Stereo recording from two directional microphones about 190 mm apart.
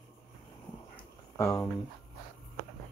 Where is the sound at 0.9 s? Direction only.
20° left (ahead or behind).